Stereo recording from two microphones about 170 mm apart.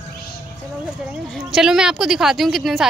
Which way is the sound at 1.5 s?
5° right (ahead or behind).